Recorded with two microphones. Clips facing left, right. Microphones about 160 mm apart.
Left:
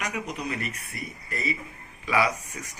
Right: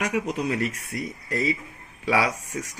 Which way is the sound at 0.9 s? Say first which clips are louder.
Right 7 dB; 90° right.